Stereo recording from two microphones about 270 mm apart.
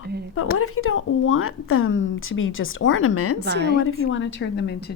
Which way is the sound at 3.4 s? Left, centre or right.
Right.